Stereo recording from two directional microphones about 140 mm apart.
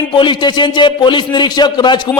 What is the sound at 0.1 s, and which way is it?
A man's voice, 35° left (ahead or behind).